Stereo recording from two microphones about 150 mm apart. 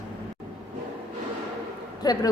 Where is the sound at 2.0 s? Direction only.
25° left (ahead or behind).